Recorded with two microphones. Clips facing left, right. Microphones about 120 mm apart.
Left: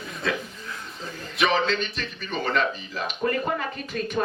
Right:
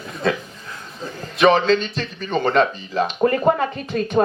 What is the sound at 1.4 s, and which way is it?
Speech, 35° right (ahead or behind).